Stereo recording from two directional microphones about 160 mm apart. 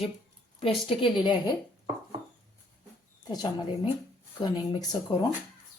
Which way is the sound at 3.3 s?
25° left (ahead or behind).